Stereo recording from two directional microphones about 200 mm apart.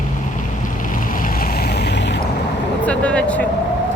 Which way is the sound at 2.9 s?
5° left (ahead or behind).